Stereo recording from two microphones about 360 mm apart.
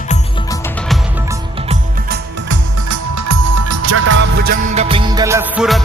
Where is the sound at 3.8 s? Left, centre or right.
Right.